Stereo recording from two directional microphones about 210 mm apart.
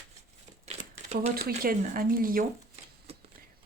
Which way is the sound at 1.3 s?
45° right (ahead or behind).